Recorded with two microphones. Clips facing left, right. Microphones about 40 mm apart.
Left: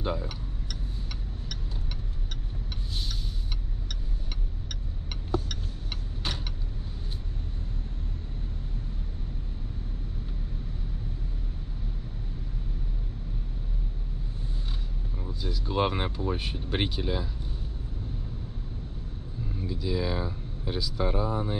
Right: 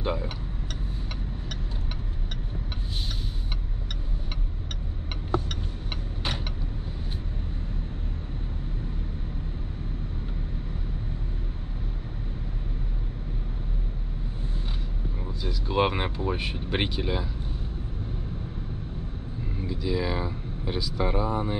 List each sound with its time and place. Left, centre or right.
0.0 s speech: right
15.4 s a sound: right
19.8 s speech: right